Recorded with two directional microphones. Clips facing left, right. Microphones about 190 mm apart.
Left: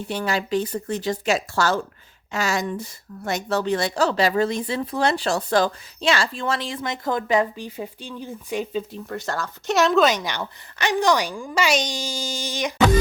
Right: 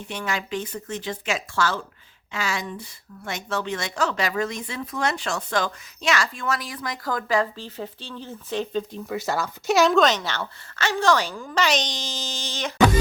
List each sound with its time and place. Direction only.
0.0 s speech: 35° left (ahead or behind); by 9.0 s 10° left (ahead or behind)
9.0 s a woman's voice: 5° right (ahead or behind); by 12.7 s 10° left (ahead or behind)